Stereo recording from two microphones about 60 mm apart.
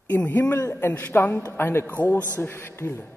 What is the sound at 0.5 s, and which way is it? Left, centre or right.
Speech, left.